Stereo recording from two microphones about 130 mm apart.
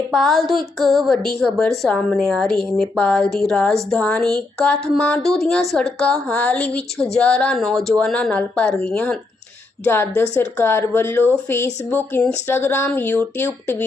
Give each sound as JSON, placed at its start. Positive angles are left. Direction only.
{"t": 0.1, "sound": "a woman's voice", "side_deg": 0}